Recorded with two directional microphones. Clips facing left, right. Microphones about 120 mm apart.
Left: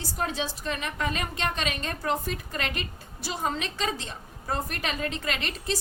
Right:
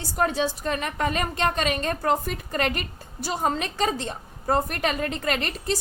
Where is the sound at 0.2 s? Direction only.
45° right (ahead or behind).